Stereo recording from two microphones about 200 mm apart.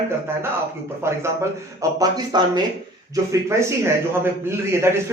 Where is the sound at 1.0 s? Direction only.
15° right (ahead or behind).